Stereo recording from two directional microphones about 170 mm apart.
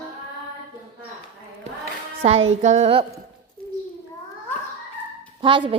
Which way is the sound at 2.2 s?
40° right (ahead or behind).